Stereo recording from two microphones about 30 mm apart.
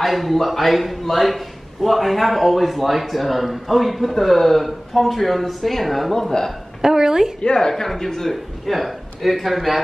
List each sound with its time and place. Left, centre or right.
0.0 s a man's voice: centre
6.8 s a woman's voice: centre
7.4 s a woman's voice: left
7.7 s speech: centre
8.6 s a man's voice: centre